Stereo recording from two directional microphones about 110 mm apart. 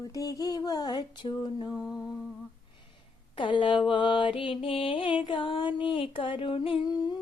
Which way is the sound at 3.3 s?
45° left (ahead or behind).